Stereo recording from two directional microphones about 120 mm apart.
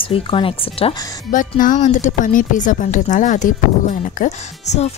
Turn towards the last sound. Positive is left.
turn(degrees=80)